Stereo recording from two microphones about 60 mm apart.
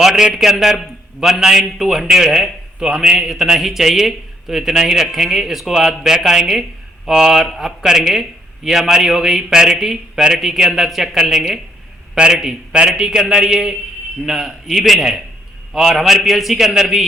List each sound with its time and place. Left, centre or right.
0.0 s a man's voice: centre